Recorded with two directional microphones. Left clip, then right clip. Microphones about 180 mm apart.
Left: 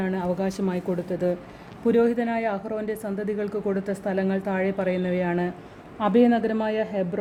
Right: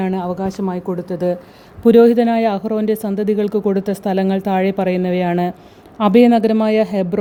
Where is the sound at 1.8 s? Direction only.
55° right (ahead or behind).